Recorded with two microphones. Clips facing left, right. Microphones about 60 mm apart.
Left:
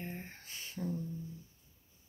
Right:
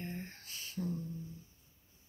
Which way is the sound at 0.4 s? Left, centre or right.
Left.